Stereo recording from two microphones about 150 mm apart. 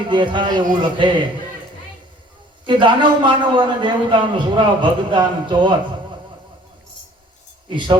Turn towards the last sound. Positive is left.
turn(degrees=-35)  # may be behind; listen again after turning